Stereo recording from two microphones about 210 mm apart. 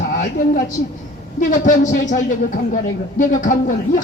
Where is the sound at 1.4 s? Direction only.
40° left (ahead or behind).